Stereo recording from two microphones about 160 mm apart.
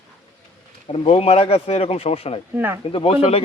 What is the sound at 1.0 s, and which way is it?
Speech, 40° left (ahead or behind).